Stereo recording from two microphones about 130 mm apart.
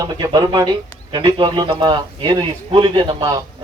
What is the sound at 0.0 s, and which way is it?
A man's voice, 30° right (ahead or behind).